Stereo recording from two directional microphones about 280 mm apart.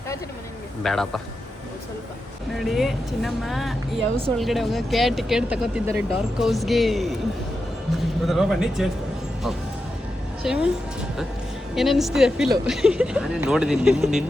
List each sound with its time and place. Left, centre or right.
0.8 s speech: centre
2.6 s speech: centre
8.3 s speech: centre
10.4 s speech: centre
11.7 s speech: centre